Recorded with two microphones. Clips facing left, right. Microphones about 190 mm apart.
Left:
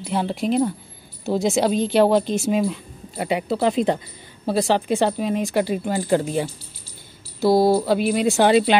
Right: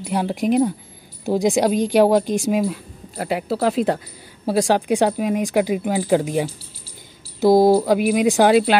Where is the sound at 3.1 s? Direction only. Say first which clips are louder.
Even; centre (ahead or behind).